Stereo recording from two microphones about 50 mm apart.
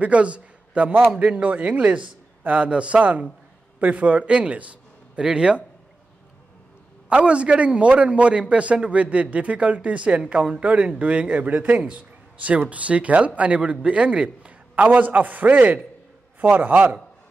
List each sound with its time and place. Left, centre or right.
0.0 s a man's voice: right
7.1 s a man's voice: right